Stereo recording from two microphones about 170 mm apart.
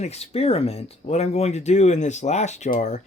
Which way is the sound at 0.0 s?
40° left (ahead or behind).